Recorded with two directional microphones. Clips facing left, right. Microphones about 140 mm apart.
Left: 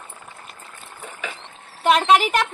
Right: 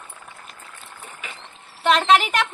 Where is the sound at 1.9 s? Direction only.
10° left (ahead or behind).